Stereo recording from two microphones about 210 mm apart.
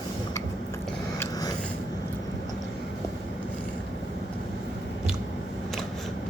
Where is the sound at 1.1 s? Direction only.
15° left (ahead or behind).